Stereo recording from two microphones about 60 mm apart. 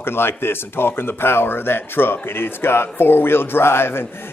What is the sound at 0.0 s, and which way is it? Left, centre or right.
Speech, left.